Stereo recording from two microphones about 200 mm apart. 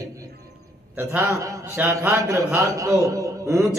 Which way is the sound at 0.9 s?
10° right (ahead or behind).